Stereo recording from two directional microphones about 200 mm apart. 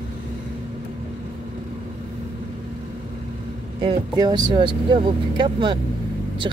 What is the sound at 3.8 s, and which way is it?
Speech, 20° right (ahead or behind).